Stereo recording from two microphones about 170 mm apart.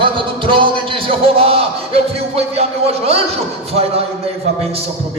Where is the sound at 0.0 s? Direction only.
30° right (ahead or behind).